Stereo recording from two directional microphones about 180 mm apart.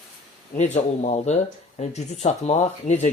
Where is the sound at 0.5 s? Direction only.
40° left (ahead or behind).